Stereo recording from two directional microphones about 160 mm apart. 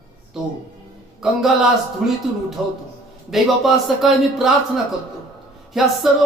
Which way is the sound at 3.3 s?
Centre (ahead or behind).